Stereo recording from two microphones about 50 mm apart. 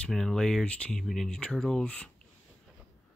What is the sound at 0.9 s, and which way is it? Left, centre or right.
Speech, centre.